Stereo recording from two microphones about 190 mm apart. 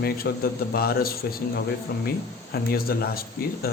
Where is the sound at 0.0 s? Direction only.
55° left (ahead or behind).